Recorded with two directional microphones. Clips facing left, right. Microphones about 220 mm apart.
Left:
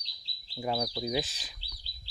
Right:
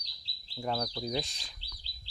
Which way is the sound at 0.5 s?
10° left (ahead or behind).